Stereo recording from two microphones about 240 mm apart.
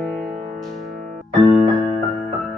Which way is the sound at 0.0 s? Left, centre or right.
Centre.